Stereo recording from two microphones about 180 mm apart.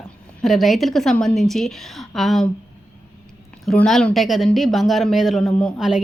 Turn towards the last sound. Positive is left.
turn(degrees=-5)  # may be behind; listen again after turning